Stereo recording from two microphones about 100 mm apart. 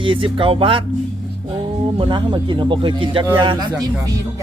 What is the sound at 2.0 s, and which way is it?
A man's voice, 55° right (ahead or behind).